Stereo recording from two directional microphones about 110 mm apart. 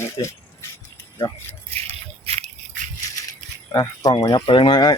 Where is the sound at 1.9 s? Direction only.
70° right (ahead or behind).